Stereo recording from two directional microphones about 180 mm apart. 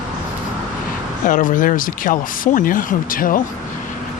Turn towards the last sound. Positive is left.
turn(degrees=50)  # may be behind; listen again after turning